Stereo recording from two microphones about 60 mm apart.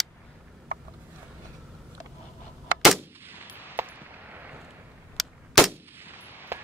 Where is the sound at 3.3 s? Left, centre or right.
Right.